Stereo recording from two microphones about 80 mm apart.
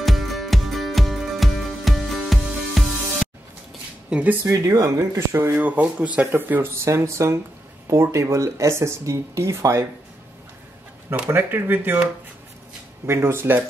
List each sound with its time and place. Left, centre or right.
0.0 s music: centre
4.1 s speech: right
4.5 s speech: right
6.8 s speech: right
11.2 s speech: right
13.0 s speech: right